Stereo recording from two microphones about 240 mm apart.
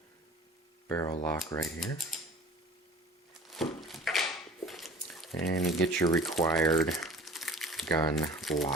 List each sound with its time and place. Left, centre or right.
0.9 s speech: centre
2.1 s a sound: centre
3.5 s a sound: centre
5.4 s speech: left
5.8 s speech: centre
6.6 s crumpling: centre
8.1 s speech: centre